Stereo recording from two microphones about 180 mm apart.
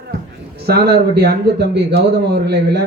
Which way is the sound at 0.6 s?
60° right (ahead or behind).